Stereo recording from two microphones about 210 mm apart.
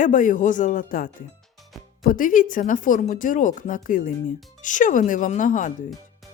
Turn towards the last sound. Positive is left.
turn(degrees=40)  # may be behind; listen again after turning